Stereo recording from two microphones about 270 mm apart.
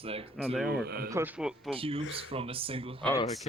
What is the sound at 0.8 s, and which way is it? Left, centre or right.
Speech, right.